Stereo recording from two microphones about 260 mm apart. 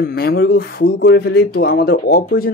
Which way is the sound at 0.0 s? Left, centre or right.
Left.